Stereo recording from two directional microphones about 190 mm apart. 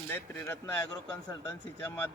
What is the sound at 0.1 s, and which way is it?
Speech, 10° left (ahead or behind).